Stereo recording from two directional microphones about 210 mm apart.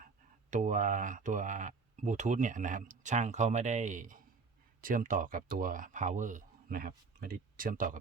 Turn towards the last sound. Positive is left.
turn(degrees=-40)  # may be behind; listen again after turning